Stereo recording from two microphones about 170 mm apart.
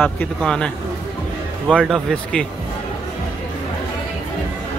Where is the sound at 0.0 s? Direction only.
5° left (ahead or behind).